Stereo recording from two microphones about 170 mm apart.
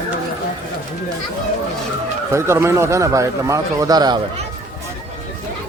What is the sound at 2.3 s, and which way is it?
Speech, 15° right (ahead or behind).